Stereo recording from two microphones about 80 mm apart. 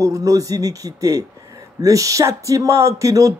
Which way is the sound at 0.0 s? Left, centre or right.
Right.